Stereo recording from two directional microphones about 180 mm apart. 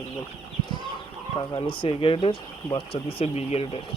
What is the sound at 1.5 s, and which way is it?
Speech, 30° left (ahead or behind).